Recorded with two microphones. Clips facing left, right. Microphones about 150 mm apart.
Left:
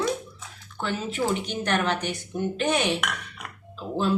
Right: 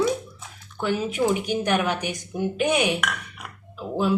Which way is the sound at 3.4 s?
10° right (ahead or behind).